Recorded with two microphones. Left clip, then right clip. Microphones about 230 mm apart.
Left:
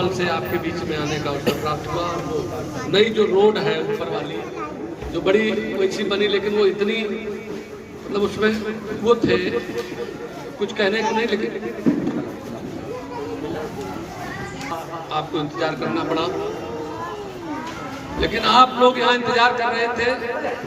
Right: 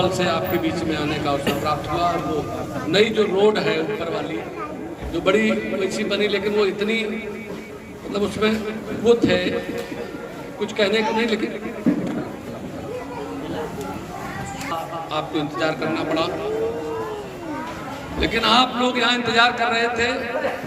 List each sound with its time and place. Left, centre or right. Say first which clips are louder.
0.0 s speech: right 1 dB; right
2.9 s a man's voice: left 1 dB; right
5.2 s a man's voice: even; right
8.1 s a man's voice: left 1 dB; right
10.6 s a man's voice: even; right
15.1 s a man's voice: left 1 dB; right
18.2 s a man's voice: left 3 dB; right